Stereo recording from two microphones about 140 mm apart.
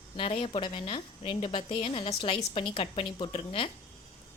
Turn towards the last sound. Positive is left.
turn(degrees=40)  # may be behind; listen again after turning